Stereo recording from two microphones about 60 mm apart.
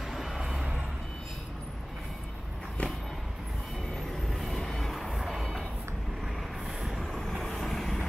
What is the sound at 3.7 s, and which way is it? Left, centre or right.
Vehicle, centre.